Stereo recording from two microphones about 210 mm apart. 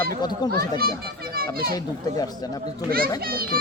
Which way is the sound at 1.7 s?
20° left (ahead or behind).